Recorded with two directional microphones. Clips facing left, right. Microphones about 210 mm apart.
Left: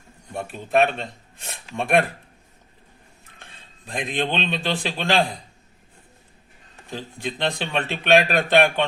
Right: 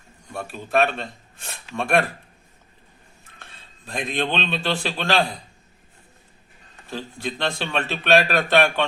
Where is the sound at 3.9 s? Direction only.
15° left (ahead or behind).